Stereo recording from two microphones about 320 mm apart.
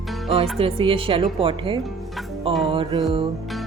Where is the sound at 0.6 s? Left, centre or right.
Centre.